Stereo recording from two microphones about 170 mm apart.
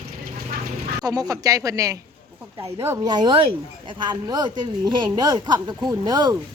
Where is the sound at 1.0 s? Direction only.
20° right (ahead or behind).